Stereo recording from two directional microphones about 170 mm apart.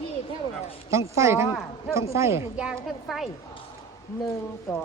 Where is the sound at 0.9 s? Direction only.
15° right (ahead or behind); by 3.3 s centre (ahead or behind).